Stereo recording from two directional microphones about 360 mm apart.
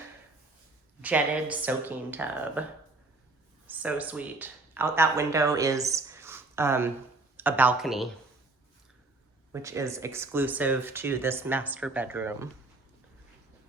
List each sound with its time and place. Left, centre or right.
1.0 s speech: centre
3.7 s speech: centre
9.5 s speech: centre